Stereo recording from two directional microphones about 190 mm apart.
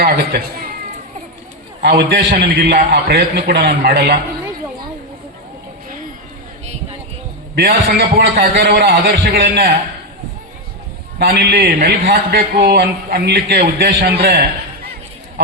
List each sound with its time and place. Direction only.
0.0 s a man's voice: 55° right (ahead or behind)
1.8 s a man's voice: 60° right (ahead or behind)
7.5 s a man's voice: 55° right (ahead or behind)
11.2 s a man's voice: 55° right (ahead or behind)